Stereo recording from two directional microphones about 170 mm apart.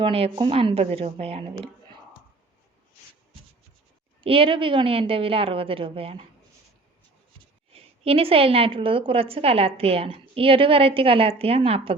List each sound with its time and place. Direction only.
0.0 s a woman's voice: 30° right (ahead or behind)
4.2 s a woman's voice: 30° right (ahead or behind)
7.7 s a woman's voice: 35° right (ahead or behind)